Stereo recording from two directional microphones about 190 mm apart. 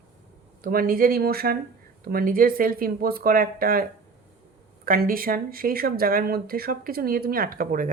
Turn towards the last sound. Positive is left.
turn(degrees=-45)  # may be behind; listen again after turning